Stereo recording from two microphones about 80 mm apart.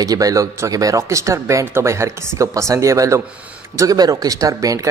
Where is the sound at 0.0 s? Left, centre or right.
Right.